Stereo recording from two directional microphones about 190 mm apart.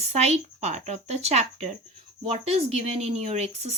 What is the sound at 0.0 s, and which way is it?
Speech, 35° right (ahead or behind).